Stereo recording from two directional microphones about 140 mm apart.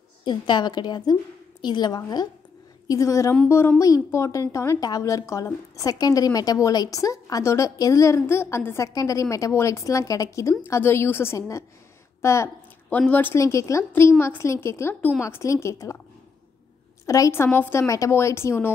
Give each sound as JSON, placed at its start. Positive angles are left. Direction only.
{"t": 0.2, "sound": "a woman's voice", "side_deg": 35}
{"t": 17.0, "sound": "a woman's voice", "side_deg": 25}